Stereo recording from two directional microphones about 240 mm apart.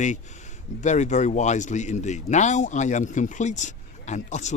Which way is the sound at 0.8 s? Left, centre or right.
Left.